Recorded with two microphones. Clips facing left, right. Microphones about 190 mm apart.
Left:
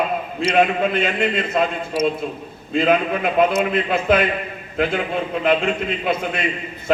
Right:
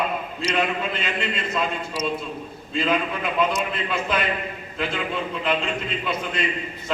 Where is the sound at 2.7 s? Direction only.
55° left (ahead or behind).